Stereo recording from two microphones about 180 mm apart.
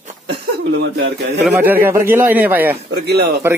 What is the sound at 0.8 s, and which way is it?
Speech, 65° right (ahead or behind).